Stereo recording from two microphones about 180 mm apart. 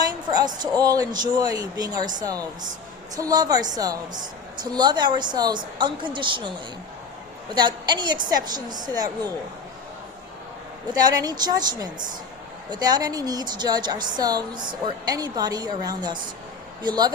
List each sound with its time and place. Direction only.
0.0 s a woman's voice: 25° right (ahead or behind)
7.5 s a woman's voice: 25° right (ahead or behind)
10.8 s a woman's voice: 20° right (ahead or behind)